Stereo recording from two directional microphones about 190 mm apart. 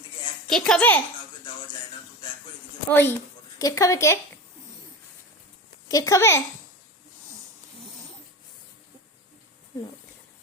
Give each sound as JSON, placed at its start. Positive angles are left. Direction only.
{"t": 0.5, "sound": "a woman's voice", "side_deg": 5}
{"t": 2.9, "sound": "a woman's voice", "side_deg": 10}
{"t": 5.9, "sound": "a woman's voice", "side_deg": 15}